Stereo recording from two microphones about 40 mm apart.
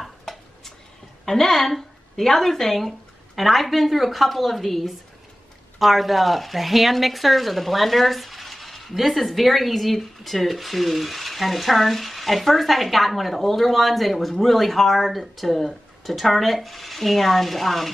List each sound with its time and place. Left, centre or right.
0.0 s stir: centre
1.2 s a woman's voice: centre